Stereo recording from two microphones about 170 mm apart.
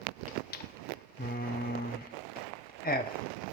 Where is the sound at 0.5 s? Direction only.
70° left (ahead or behind).